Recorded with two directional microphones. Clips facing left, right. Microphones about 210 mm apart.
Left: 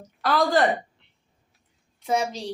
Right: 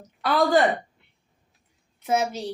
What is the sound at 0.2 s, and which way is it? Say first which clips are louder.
Speech: right 1 dB; centre (ahead or behind).